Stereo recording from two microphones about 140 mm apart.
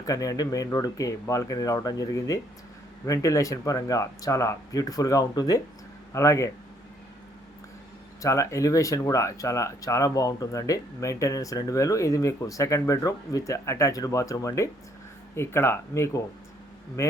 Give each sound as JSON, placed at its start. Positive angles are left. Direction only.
{"t": 0.0, "sound": "speech", "side_deg": 25}
{"t": 8.2, "sound": "speech", "side_deg": 20}